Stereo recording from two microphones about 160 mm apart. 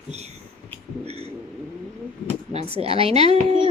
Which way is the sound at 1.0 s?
40° right (ahead or behind).